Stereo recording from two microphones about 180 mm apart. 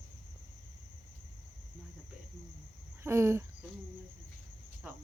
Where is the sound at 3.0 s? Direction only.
15° right (ahead or behind).